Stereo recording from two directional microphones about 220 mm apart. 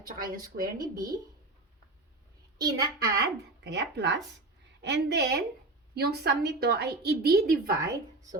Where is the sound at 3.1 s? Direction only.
50° right (ahead or behind).